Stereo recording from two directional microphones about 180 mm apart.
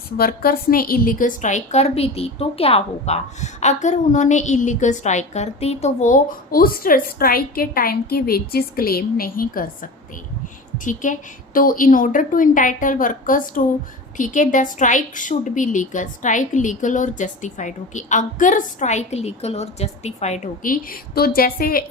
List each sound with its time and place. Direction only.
0.2 s a woman's voice: 55° left (ahead or behind)